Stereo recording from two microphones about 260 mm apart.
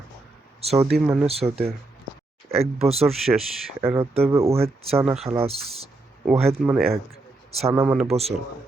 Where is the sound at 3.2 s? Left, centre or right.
Centre.